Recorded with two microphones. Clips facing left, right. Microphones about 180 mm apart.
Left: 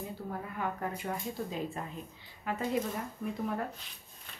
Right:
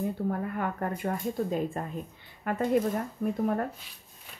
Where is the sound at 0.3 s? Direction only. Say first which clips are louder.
Right 6 dB; 55° right (ahead or behind).